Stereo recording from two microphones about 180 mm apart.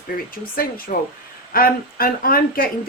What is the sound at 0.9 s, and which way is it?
A woman's voice, 50° left (ahead or behind).